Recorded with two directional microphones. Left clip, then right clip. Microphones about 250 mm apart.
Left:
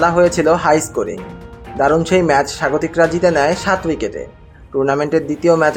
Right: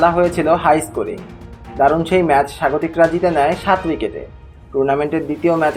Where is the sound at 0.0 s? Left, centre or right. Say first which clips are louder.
Left 2 dB; left.